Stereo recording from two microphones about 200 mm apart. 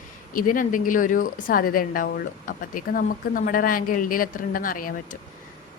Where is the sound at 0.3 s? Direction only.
40° left (ahead or behind).